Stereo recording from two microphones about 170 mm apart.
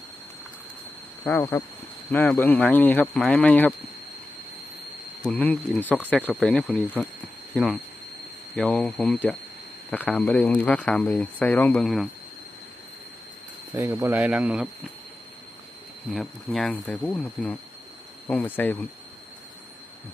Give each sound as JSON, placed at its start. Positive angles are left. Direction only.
{"t": 1.2, "sound": "speech", "side_deg": 15}
{"t": 5.2, "sound": "speech", "side_deg": 5}
{"t": 13.7, "sound": "speech", "side_deg": -15}
{"t": 16.1, "sound": "speech", "side_deg": 0}